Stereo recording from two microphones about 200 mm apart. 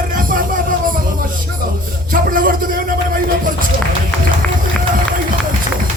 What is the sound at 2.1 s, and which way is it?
Speech, 45° right (ahead or behind).